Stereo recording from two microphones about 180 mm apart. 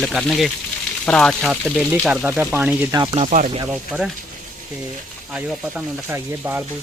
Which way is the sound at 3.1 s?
40° right (ahead or behind).